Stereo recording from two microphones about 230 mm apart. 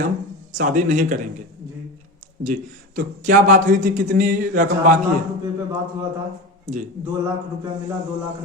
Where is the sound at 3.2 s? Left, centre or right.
Right.